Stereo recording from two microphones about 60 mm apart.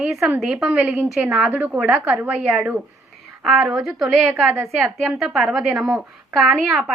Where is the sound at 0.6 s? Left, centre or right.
Right.